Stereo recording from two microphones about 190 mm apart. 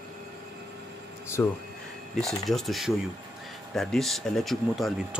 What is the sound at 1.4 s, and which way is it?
Speech, 10° left (ahead or behind).